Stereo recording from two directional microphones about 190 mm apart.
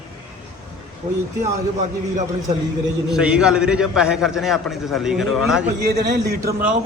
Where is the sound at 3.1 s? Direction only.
5° right (ahead or behind).